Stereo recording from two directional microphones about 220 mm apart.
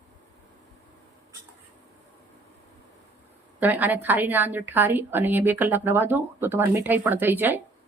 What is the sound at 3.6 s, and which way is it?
A woman's voice, 10° right (ahead or behind).